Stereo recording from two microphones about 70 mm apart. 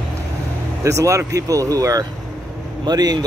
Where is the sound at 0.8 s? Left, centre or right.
Right.